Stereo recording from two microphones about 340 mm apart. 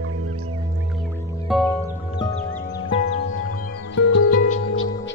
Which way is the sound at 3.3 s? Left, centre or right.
Left.